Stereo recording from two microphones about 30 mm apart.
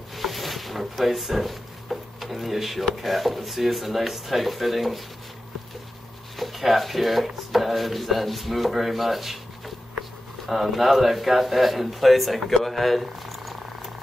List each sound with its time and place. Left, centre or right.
0.1 s drawer open or close: centre
3.0 s speech: centre
6.3 s speech: centre
10.4 s speech: centre